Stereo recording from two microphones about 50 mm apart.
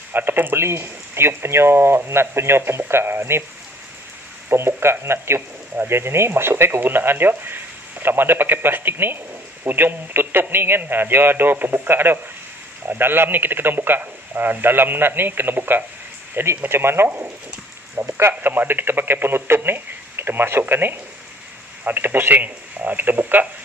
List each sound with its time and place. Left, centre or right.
0.1 s speech: right
4.5 s speech: right
6.8 s speech: right